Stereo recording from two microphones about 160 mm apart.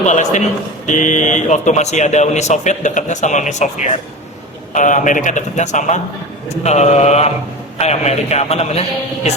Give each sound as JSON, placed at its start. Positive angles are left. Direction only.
{"t": 0.0, "sound": "a man's voice", "side_deg": 50}